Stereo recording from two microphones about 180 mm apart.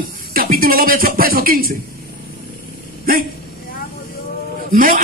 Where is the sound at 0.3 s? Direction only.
55° right (ahead or behind).